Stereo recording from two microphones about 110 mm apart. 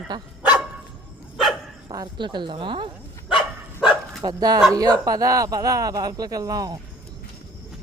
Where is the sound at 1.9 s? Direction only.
40° right (ahead or behind).